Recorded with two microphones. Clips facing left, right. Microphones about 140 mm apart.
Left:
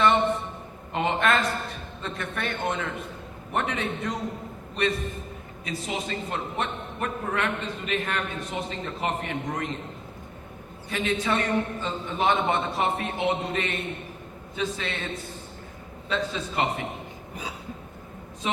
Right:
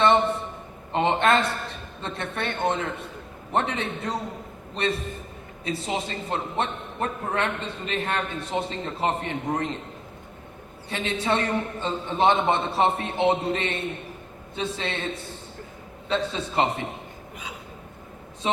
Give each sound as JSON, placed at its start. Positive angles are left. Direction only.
{"t": 0.9, "sound": "a man's voice", "side_deg": -30}
{"t": 10.8, "sound": "a man's voice", "side_deg": -30}
{"t": 16.0, "sound": "a man's voice", "side_deg": -30}
{"t": 18.4, "sound": "a man's voice", "side_deg": -30}